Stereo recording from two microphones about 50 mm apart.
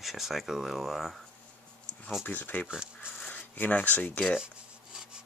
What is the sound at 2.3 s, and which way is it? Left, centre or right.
Speech, left.